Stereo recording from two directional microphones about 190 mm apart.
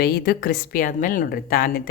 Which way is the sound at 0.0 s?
55° left (ahead or behind).